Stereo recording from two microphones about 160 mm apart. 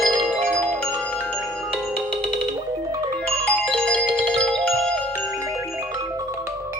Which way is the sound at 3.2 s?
5° left (ahead or behind).